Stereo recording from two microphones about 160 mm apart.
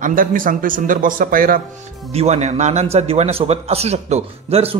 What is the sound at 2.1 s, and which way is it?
A man's voice, 40° right (ahead or behind).